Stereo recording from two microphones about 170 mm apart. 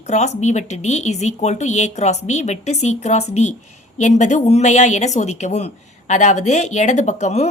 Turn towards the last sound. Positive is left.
turn(degrees=40)  # may be behind; listen again after turning